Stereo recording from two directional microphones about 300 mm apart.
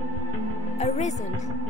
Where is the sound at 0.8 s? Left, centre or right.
Left.